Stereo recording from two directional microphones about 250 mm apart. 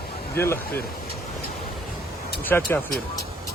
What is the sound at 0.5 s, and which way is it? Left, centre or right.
Speech, left.